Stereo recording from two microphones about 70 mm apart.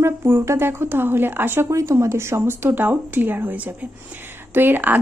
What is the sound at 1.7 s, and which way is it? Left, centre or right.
A woman's voice, right.